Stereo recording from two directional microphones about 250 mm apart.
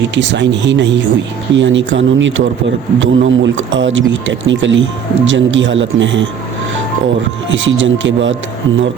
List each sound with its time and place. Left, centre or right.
0.1 s speech: right
7.5 s speech: right